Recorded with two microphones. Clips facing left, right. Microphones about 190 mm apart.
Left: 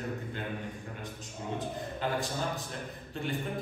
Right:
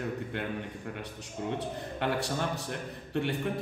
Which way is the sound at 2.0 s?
70° right (ahead or behind).